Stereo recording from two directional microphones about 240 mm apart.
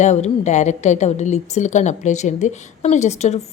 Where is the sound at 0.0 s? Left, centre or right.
Left.